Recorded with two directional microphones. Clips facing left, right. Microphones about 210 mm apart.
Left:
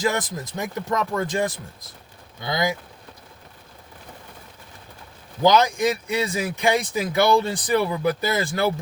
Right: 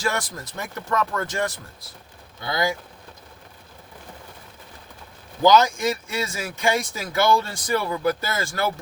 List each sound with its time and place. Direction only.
0.0 s speech: 20° left (ahead or behind)
5.4 s speech: 15° left (ahead or behind)